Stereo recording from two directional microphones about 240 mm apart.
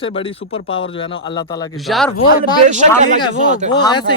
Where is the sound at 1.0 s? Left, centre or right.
Centre.